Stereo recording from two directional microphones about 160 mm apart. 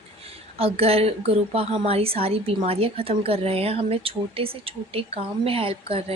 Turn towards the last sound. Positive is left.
turn(degrees=-35)  # may be behind; listen again after turning